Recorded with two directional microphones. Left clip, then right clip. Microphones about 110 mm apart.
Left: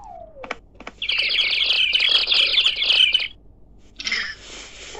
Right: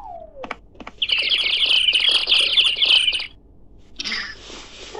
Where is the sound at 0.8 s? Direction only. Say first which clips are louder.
Even; 55° right (ahead or behind).